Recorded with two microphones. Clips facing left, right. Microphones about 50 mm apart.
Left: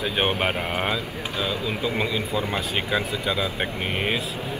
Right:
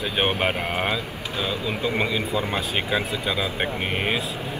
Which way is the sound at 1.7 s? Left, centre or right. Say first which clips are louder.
Right 1 dB; right.